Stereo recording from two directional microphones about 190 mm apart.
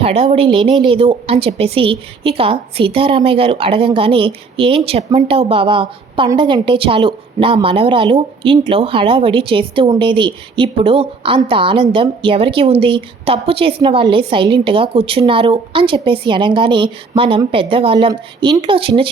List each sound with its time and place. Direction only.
0.0 s a woman's voice: 30° right (ahead or behind)